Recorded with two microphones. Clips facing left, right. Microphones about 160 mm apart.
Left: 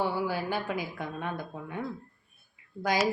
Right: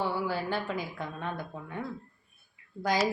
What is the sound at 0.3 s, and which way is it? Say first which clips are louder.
Speech: even; 10° left (ahead or behind).